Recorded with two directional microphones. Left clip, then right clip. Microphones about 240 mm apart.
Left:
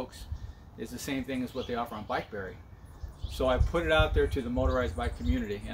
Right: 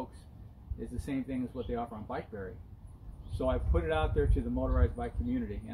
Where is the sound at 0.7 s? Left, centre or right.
Centre.